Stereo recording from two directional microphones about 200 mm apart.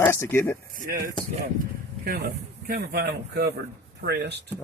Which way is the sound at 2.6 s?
50° right (ahead or behind).